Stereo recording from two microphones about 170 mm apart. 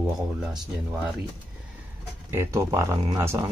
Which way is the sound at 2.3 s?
15° right (ahead or behind).